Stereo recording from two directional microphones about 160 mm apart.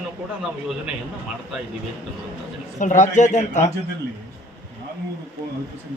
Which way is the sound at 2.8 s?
50° left (ahead or behind).